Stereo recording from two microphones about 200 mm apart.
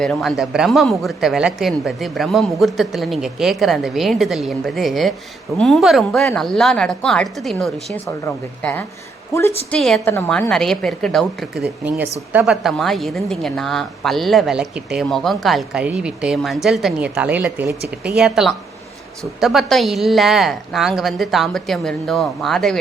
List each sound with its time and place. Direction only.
0.0 s a woman's voice: centre (ahead or behind)
17.8 s speech: 55° right (ahead or behind)
18.2 s a woman's voice: centre (ahead or behind)